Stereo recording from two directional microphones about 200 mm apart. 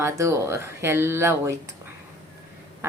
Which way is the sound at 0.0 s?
15° right (ahead or behind).